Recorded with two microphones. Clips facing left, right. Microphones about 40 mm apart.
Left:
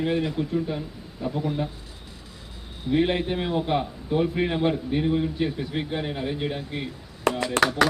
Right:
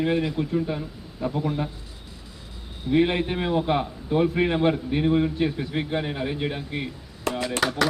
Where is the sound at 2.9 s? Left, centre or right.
Centre.